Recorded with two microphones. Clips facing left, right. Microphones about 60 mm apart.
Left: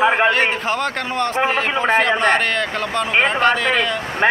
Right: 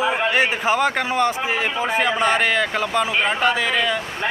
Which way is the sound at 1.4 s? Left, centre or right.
Left.